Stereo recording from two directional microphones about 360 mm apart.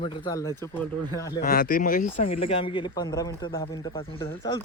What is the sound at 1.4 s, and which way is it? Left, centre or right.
Speech, left.